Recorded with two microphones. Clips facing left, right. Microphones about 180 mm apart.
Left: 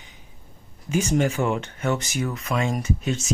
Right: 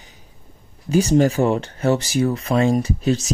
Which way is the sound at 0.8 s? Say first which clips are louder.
Right 6 dB; 35° right (ahead or behind).